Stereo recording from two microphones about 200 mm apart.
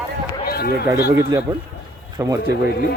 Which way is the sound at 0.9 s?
15° right (ahead or behind).